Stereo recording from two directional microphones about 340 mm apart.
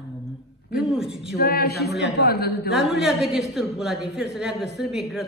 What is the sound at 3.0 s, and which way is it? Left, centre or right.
A woman's voice, centre.